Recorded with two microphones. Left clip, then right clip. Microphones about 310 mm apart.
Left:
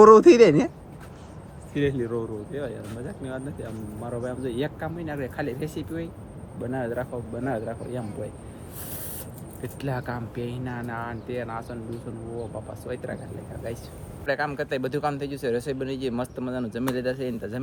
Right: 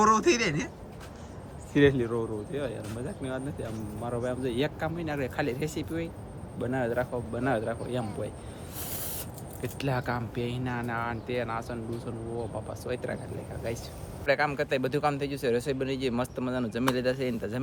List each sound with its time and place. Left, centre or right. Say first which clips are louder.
0.0 s speech: left 11 dB; centre
1.7 s speech: right 4 dB; right
2.0 s speech: left 1 dB; centre
9.6 s speech: even; centre
12.8 s speech: even; centre